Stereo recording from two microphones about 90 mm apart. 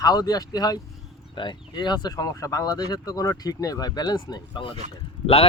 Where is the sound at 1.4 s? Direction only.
55° left (ahead or behind).